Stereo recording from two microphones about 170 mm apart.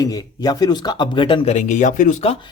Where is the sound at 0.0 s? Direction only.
20° left (ahead or behind).